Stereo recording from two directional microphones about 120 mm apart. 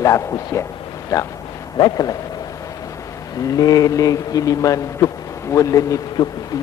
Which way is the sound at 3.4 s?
30° left (ahead or behind).